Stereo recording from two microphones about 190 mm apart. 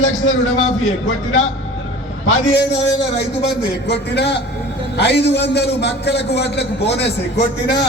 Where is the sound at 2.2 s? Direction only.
85° left.